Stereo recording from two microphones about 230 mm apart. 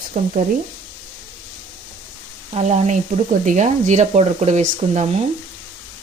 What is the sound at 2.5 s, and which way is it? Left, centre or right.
Speech, right.